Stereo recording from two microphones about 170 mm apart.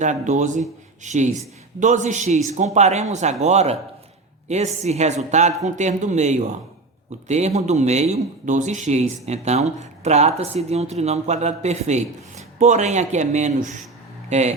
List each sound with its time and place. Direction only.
0.0 s speech: 45° right (ahead or behind)